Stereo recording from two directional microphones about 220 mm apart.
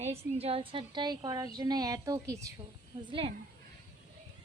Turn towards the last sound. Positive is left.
turn(degrees=-25)  # may be behind; listen again after turning